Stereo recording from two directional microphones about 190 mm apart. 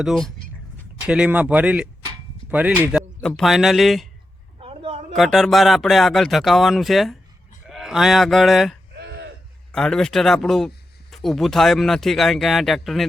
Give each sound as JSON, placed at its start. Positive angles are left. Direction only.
{"t": 0.0, "sound": "speech", "side_deg": 0}
{"t": 3.2, "sound": "speech", "side_deg": 5}
{"t": 4.6, "sound": "a sound", "side_deg": -30}
{"t": 5.1, "sound": "speech", "side_deg": 0}
{"t": 7.7, "sound": "cattle", "side_deg": 0}
{"t": 9.0, "sound": "a sound", "side_deg": -65}
{"t": 9.7, "sound": "speech", "side_deg": 5}